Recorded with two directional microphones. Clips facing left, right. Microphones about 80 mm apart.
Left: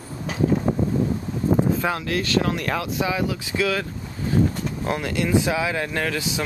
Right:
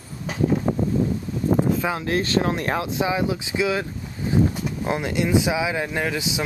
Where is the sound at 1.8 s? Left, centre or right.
Centre.